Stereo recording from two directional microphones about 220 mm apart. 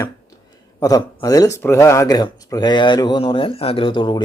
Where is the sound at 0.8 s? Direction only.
15° left (ahead or behind).